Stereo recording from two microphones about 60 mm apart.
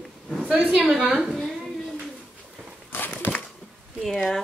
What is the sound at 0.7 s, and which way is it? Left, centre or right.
Speech, right.